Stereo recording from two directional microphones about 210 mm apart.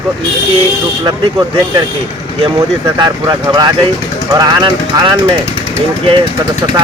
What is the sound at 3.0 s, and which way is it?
Speech, 20° right (ahead or behind).